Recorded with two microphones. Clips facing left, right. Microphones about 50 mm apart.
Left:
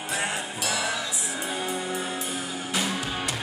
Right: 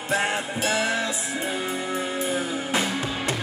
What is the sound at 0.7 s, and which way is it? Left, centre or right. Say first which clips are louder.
Music: right 4 dB; right.